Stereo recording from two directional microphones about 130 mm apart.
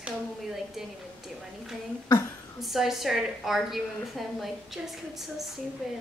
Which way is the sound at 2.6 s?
Centre (ahead or behind).